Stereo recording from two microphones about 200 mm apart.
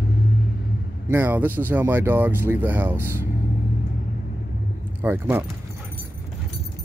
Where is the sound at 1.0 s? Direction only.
10° right (ahead or behind).